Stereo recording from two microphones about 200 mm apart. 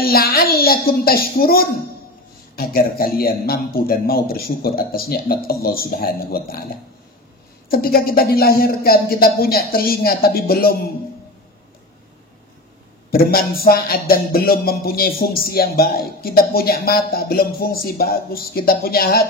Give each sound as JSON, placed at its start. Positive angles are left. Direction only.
{"t": 0.0, "sound": "speech", "side_deg": 50}
{"t": 7.7, "sound": "speech", "side_deg": 50}
{"t": 13.1, "sound": "speech", "side_deg": 50}